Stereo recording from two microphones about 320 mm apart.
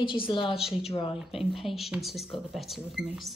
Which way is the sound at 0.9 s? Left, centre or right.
Centre.